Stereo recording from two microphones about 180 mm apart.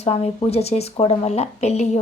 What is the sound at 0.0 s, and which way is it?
A woman's voice, 35° left (ahead or behind).